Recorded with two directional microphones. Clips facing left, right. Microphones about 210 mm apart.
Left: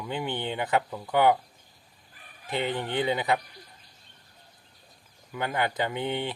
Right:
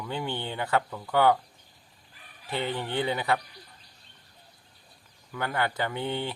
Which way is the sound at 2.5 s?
15° left (ahead or behind).